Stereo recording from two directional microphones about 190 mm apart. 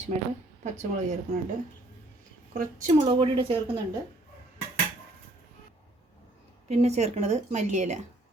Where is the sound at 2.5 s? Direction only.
40° right (ahead or behind).